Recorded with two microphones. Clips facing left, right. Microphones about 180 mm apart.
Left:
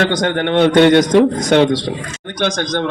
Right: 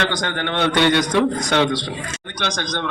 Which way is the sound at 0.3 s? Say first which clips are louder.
Left 8 dB; 50° left (ahead or behind).